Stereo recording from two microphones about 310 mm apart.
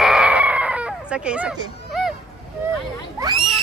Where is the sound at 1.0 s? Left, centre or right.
Centre.